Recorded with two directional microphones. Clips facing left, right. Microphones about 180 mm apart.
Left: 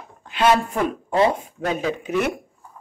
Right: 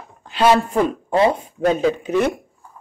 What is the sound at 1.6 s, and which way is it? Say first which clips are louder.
Speech: right 8 dB; 30° right (ahead or behind).